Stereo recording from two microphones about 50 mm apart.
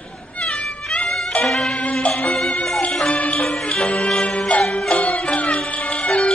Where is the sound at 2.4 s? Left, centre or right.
Centre.